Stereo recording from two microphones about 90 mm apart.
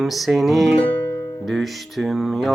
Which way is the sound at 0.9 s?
25° left (ahead or behind).